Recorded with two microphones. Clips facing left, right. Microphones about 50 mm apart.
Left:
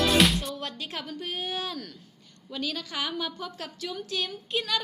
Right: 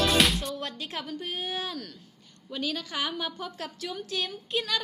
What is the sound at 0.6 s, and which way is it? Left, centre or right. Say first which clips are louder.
Music: even; right.